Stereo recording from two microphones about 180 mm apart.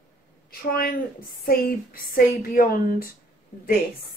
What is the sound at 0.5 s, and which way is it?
A woman's voice, 55° left (ahead or behind).